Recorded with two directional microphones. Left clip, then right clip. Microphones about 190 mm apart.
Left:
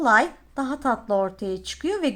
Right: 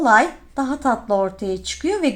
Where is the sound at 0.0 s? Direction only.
20° left (ahead or behind).